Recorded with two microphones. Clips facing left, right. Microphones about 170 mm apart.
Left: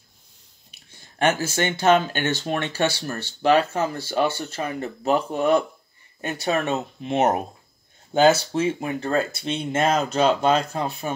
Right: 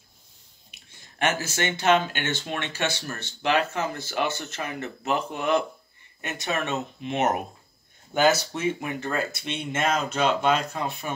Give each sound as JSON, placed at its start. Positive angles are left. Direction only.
{"t": 0.7, "sound": "speech", "side_deg": 35}